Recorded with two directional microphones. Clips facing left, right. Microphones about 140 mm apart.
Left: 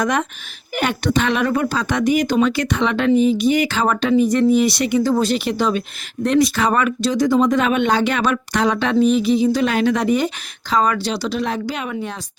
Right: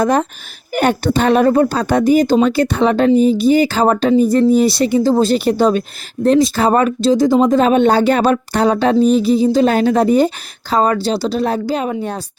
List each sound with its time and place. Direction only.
0.0 s speech: 35° right (ahead or behind)